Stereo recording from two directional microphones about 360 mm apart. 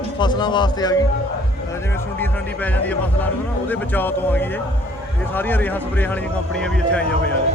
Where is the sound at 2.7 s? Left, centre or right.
Centre.